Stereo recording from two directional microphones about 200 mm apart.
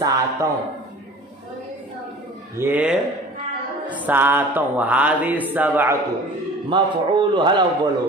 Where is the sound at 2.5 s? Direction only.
10° right (ahead or behind).